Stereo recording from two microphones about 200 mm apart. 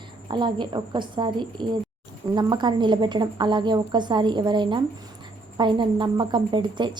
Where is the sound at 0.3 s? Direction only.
20° right (ahead or behind).